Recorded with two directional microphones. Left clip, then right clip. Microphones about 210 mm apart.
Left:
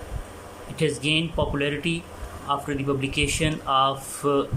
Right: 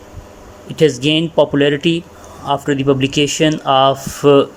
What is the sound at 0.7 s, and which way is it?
Speech, 35° right (ahead or behind).